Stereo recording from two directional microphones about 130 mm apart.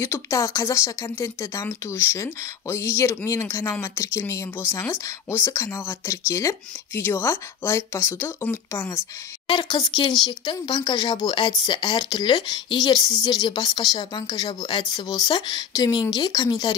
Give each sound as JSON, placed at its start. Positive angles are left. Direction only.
{"t": 0.0, "sound": "speech", "side_deg": 20}
{"t": 9.5, "sound": "speech", "side_deg": 35}